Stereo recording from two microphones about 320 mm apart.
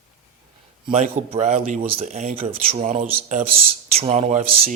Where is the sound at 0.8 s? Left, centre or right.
Right.